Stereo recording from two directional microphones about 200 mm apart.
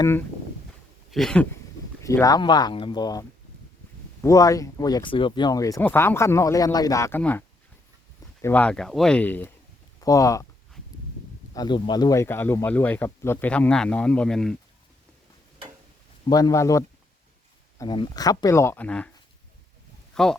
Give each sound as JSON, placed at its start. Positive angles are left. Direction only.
{"t": 1.1, "sound": "speech", "side_deg": 5}
{"t": 2.0, "sound": "speech", "side_deg": 15}
{"t": 11.5, "sound": "speech", "side_deg": 20}
{"t": 16.3, "sound": "speech", "side_deg": 15}
{"t": 20.1, "sound": "speech", "side_deg": 5}